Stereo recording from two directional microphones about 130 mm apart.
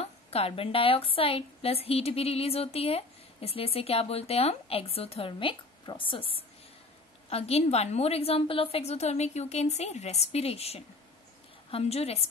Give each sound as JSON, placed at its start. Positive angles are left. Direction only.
{"t": 0.0, "sound": "a woman's voice", "side_deg": 50}